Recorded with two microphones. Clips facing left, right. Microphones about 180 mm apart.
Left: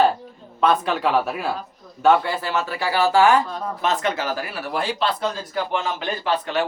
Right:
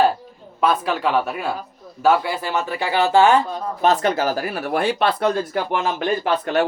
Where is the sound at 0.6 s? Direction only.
Centre (ahead or behind); by 3.3 s 25° right (ahead or behind).